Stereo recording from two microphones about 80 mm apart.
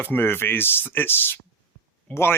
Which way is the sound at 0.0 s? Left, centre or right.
Left.